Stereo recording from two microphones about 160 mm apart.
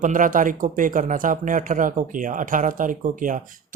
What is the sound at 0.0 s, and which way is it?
Speech, 55° right (ahead or behind).